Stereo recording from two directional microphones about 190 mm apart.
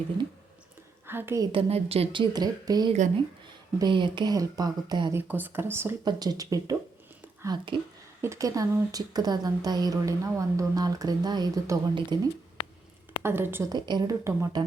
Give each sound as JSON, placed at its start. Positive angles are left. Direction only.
{"t": 1.0, "sound": "a woman's voice", "side_deg": -10}
{"t": 1.5, "sound": "a woman's voice", "side_deg": -30}
{"t": 5.3, "sound": "a woman's voice", "side_deg": -10}